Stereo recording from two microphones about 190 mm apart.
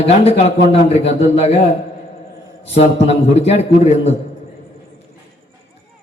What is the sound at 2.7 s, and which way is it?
A man's voice, 35° left (ahead or behind).